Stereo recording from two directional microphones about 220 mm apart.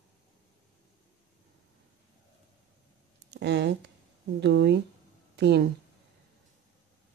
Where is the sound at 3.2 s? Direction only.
50° right (ahead or behind).